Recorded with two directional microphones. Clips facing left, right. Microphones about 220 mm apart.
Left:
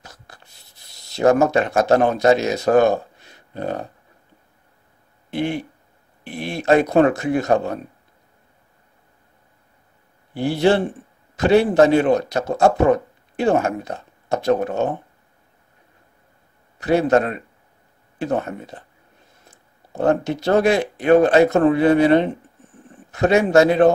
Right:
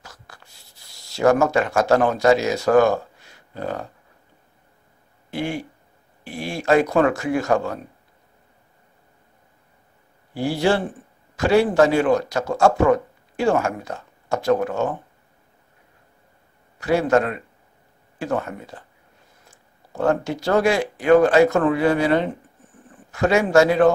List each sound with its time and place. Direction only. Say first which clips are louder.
0.0 s writing: left 1 dB; 20° left (ahead or behind)
5.3 s speech: left 3 dB; 20° left (ahead or behind)
10.3 s speech: left 3 dB; 20° left (ahead or behind)
16.8 s speech: left 2 dB; 20° left (ahead or behind)